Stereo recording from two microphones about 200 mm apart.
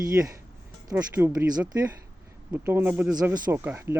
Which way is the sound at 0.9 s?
10° right (ahead or behind).